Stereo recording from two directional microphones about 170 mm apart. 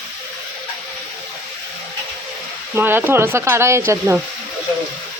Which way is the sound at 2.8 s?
15° right (ahead or behind).